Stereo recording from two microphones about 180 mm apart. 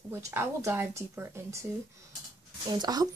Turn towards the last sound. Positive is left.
turn(degrees=-20)  # may be behind; listen again after turning